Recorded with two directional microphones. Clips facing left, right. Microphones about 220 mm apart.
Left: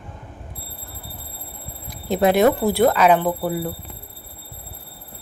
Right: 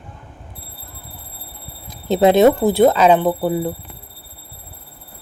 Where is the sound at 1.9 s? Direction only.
25° right (ahead or behind).